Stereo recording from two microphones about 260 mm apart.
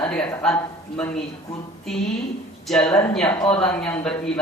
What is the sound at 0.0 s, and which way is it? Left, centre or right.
A man's voice, centre.